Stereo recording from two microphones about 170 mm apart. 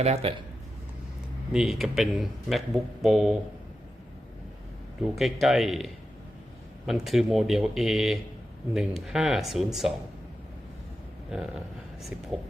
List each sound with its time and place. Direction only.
0.0 s speech: 40° right (ahead or behind)
1.5 s speech: centre (ahead or behind)
5.1 s speech: centre (ahead or behind)
11.3 s speech: 5° right (ahead or behind)